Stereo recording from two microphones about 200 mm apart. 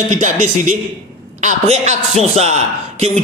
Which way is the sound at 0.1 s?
40° right (ahead or behind).